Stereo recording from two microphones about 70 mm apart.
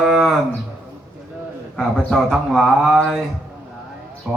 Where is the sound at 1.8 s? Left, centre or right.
Centre.